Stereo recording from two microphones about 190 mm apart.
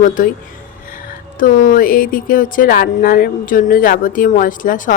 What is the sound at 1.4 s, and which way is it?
Speech, 45° left (ahead or behind).